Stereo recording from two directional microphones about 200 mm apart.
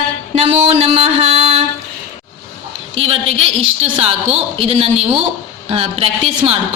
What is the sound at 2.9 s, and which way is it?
A woman's voice, 30° right (ahead or behind).